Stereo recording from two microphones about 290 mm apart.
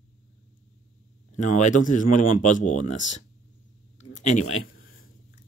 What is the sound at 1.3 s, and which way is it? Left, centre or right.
Speech, left.